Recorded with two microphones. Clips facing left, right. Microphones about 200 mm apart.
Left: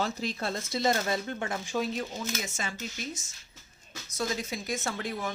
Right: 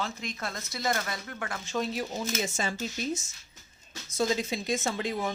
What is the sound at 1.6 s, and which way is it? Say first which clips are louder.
Speech: right 2 dB; 10° left (ahead or behind).